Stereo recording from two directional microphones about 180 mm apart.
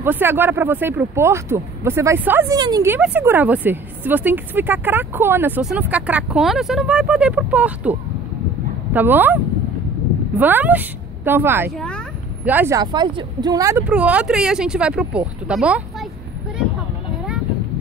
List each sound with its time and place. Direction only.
0.0 s a woman's voice: 10° right (ahead or behind)
12.8 s speech: 25° right (ahead or behind); by 16.1 s 5° right (ahead or behind)